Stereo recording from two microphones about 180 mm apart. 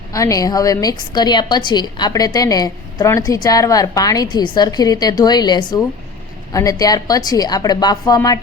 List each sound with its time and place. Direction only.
0.1 s a woman's voice: 20° left (ahead or behind)